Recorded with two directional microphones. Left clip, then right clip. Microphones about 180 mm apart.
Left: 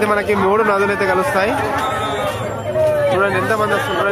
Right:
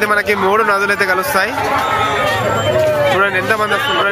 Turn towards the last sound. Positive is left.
turn(degrees=-10)  # may be behind; listen again after turning